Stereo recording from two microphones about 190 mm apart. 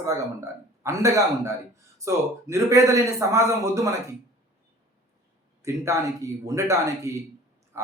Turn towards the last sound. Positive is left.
turn(degrees=-15)  # may be behind; listen again after turning